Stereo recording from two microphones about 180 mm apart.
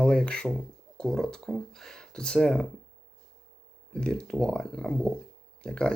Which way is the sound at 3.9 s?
5° left (ahead or behind).